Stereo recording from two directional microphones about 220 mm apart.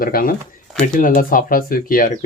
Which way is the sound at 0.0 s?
40° left (ahead or behind).